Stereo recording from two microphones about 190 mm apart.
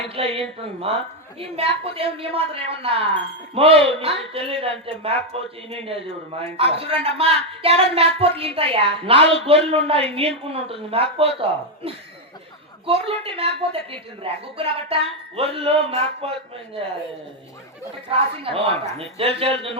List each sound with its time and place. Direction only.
0.1 s speech: 30° right (ahead or behind)
18.4 s speech: 30° right (ahead or behind)